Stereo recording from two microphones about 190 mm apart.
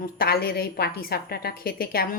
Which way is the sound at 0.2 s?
55° left (ahead or behind).